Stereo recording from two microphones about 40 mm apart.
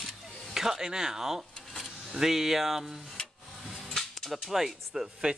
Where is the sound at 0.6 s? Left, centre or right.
Centre.